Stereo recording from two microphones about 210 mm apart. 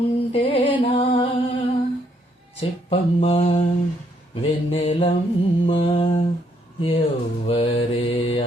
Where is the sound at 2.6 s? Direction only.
25° left (ahead or behind).